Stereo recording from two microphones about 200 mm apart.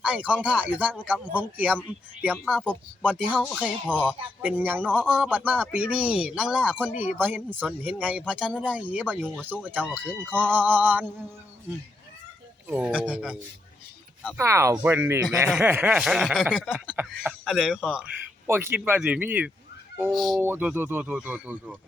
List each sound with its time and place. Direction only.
0.0 s speech: 5° right (ahead or behind)
2.2 s a sound: 5° right (ahead or behind)
4.4 s speech: 10° right (ahead or behind)
8.3 s a sound: 5° right (ahead or behind)
9.4 s speech: 10° right (ahead or behind)
12.6 s speech: 5° right (ahead or behind)
14.3 s speech: 15° right (ahead or behind)
15.4 s a sound: 5° right (ahead or behind)
20.4 s speech: 10° right (ahead or behind)